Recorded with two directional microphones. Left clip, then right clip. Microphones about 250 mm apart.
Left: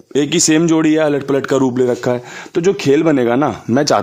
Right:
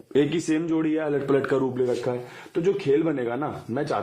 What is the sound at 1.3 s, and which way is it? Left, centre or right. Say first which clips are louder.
Speech: left 8 dB; left.